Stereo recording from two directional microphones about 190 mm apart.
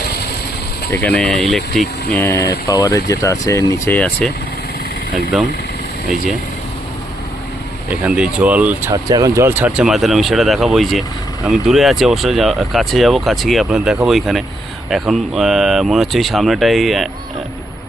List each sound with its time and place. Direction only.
0.9 s speech: 10° left (ahead or behind)
2.1 s speech: 15° left (ahead or behind)
8.0 s speech: 5° right (ahead or behind)